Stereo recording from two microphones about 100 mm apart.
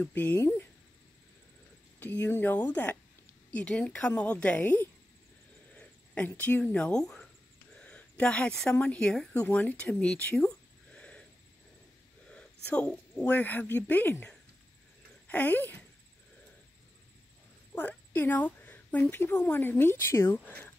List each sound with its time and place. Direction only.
0.0 s a woman's voice: 15° left (ahead or behind)
2.0 s a woman's voice: 20° left (ahead or behind)
7.8 s a sound: 10° left (ahead or behind)
8.7 s speech: 10° left (ahead or behind)
12.3 s a sound: 10° left (ahead or behind)
13.2 s a woman's voice: 15° left (ahead or behind)
17.7 s speech: 15° left (ahead or behind)